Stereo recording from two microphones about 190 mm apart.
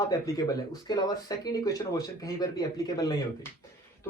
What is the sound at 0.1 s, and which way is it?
Speech, 20° left (ahead or behind).